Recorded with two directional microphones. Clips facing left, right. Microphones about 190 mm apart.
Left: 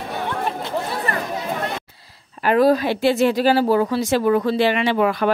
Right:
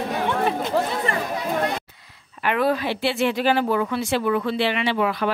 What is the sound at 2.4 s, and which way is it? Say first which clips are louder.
Speech: left 6 dB; 40° left (ahead or behind).